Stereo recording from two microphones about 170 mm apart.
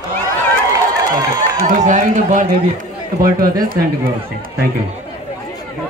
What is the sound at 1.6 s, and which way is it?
Run, 50° right (ahead or behind).